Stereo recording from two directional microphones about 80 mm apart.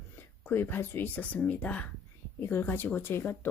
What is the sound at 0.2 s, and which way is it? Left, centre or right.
Speech, left.